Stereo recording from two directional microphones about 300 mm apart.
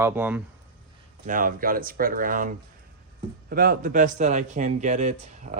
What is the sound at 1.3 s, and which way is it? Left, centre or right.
Speech, right.